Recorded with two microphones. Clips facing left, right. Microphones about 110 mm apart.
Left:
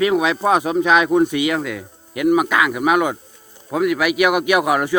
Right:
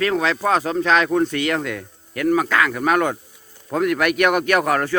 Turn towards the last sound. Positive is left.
turn(degrees=10)  # may be behind; listen again after turning